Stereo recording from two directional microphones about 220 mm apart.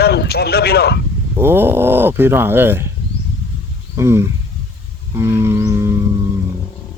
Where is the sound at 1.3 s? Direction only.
10° right (ahead or behind).